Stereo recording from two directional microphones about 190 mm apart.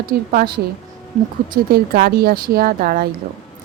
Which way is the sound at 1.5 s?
50° right (ahead or behind).